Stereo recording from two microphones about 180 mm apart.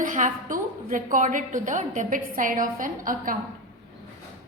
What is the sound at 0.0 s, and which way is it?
A woman's voice, 45° right (ahead or behind).